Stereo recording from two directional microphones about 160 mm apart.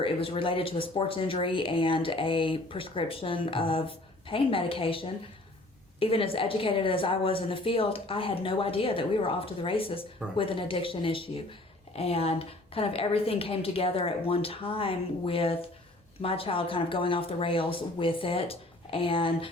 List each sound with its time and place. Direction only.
0.0 s speech: 35° left (ahead or behind)